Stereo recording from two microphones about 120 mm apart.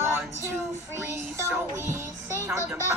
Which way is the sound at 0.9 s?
25° right (ahead or behind).